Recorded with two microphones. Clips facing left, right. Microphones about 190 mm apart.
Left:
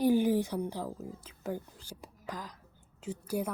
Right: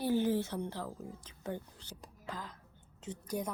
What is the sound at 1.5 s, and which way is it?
Speech, 10° left (ahead or behind).